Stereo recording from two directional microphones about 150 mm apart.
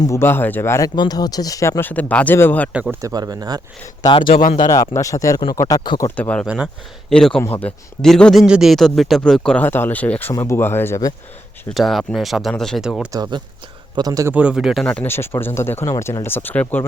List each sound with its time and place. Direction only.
0.0 s speech: 20° left (ahead or behind)
3.0 s speech: 25° right (ahead or behind)
4.0 s speech: 35° left (ahead or behind)
6.1 s speech: 10° left (ahead or behind)
6.4 s speech: 5° right (ahead or behind)
7.1 s a man's voice: 5° left (ahead or behind)
11.7 s a man's voice: centre (ahead or behind)
13.1 s speech: 30° right (ahead or behind)
14.3 s speech: 5° right (ahead or behind); by 16.8 s 10° left (ahead or behind)